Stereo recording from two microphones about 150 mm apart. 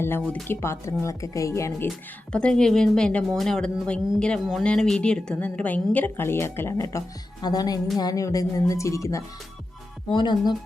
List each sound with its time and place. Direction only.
0.0 s speech: 15° left (ahead or behind)
1.9 s speech: 5° left (ahead or behind)
10.1 s speech: 30° left (ahead or behind)